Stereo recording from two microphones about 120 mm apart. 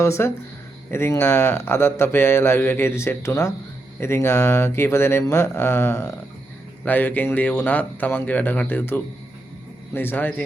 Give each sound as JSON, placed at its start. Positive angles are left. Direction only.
{"t": 0.0, "sound": "a man's voice", "side_deg": 20}